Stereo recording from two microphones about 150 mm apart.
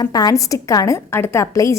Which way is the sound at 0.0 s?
25° left (ahead or behind).